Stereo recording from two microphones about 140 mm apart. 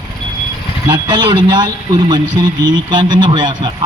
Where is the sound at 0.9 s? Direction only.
35° right (ahead or behind).